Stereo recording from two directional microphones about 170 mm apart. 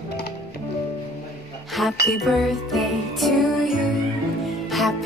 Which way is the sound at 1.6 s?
Centre (ahead or behind).